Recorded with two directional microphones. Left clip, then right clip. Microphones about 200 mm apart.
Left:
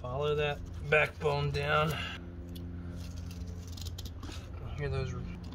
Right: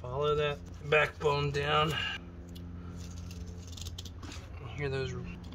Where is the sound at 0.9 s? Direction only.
30° right (ahead or behind).